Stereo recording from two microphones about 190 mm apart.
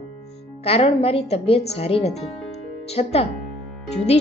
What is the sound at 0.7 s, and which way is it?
A woman's voice, 30° left (ahead or behind).